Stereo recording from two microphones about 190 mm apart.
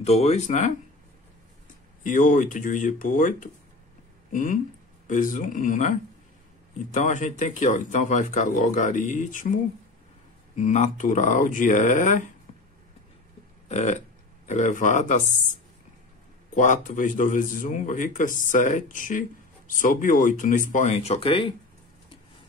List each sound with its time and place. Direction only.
0.0 s speech: 35° left (ahead or behind)
2.0 s a man's voice: 40° left (ahead or behind)
10.5 s speech: 40° left (ahead or behind)
13.7 s a sound: 35° left (ahead or behind)
14.5 s speech: 40° left (ahead or behind)
16.5 s a man's voice: 40° left (ahead or behind)